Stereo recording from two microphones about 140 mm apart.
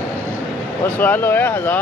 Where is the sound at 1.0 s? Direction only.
15° left (ahead or behind).